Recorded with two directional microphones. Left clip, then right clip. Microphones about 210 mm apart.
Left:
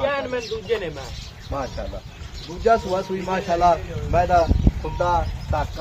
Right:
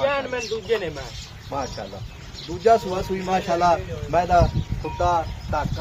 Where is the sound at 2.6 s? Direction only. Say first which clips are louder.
Right 1 dB; 50° right (ahead or behind).